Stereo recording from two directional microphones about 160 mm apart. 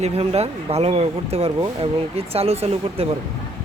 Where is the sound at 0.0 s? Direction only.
40° right (ahead or behind).